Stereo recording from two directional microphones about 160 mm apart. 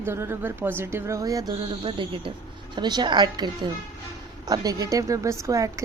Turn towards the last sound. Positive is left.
turn(degrees=-20)  # may be behind; listen again after turning